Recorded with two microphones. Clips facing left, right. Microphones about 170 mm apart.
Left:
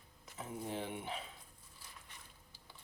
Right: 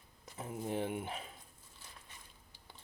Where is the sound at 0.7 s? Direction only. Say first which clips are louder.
Right 6 dB; 55° right (ahead or behind).